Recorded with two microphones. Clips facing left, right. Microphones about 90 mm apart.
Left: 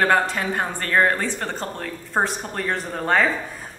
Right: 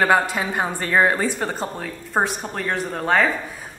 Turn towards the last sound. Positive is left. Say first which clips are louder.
# right 1 dB
turn(degrees=0)  # may be behind; listen again after turning